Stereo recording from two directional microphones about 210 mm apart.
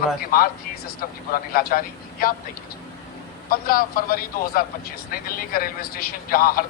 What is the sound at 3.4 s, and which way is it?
A man's voice, 45° left (ahead or behind).